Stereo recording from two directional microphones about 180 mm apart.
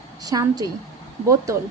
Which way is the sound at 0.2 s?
20° right (ahead or behind).